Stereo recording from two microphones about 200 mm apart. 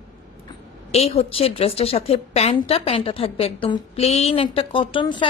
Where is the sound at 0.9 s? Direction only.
30° left (ahead or behind).